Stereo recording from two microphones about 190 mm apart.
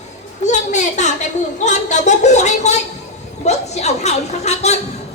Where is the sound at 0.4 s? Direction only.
40° left (ahead or behind).